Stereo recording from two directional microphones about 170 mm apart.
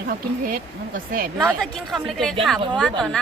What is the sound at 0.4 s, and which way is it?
Speech, 55° right (ahead or behind).